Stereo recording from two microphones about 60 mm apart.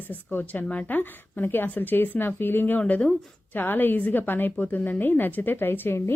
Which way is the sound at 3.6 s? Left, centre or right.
Left.